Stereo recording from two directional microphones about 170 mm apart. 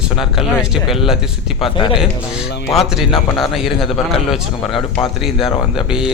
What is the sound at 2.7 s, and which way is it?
Speech, centre (ahead or behind).